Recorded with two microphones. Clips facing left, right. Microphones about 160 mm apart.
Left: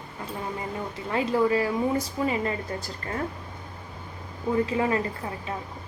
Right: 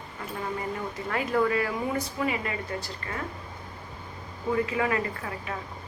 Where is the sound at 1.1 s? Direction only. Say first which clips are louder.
Left 3 dB; 25° left (ahead or behind).